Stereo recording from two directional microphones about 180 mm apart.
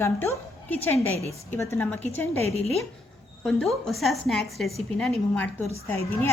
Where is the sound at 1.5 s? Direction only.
15° left (ahead or behind).